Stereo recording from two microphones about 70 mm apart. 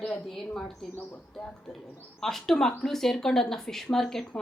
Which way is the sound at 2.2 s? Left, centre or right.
Centre.